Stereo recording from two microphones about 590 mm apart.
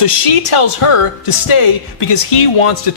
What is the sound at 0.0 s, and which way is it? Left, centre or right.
Speech, left.